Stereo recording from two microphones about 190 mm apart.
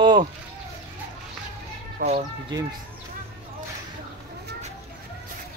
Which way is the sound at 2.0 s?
50° right (ahead or behind).